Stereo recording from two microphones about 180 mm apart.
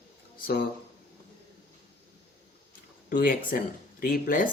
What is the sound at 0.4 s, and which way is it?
Speech, 65° left (ahead or behind).